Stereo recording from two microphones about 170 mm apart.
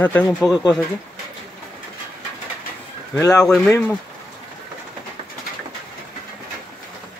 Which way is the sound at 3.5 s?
5° left (ahead or behind).